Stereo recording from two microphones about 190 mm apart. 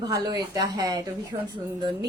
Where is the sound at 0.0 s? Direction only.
20° right (ahead or behind).